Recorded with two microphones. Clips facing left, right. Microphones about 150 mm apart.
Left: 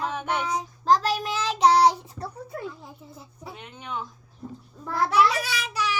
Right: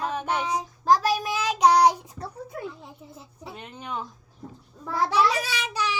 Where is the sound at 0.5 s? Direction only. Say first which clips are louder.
Even; 15° right (ahead or behind).